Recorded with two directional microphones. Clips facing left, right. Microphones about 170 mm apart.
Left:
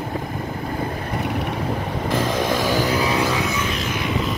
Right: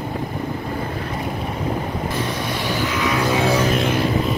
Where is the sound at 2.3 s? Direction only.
90° left.